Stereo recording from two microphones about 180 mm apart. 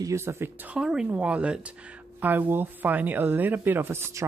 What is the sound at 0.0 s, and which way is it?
Speech, 15° right (ahead or behind).